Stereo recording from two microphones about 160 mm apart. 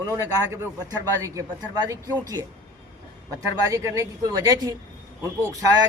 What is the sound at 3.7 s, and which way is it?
A man's voice, 20° right (ahead or behind).